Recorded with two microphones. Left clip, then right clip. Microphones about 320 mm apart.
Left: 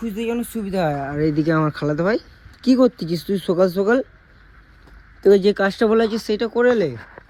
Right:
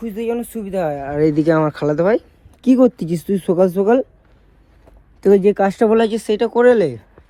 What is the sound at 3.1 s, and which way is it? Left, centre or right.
Speech, right.